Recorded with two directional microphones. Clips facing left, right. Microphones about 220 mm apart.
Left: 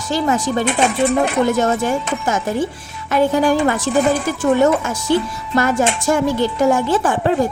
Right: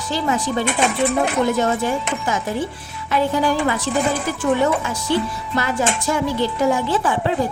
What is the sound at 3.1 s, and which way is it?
Speech, 50° left (ahead or behind).